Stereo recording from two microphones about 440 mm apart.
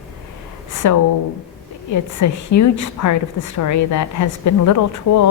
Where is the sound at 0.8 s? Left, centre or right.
Left.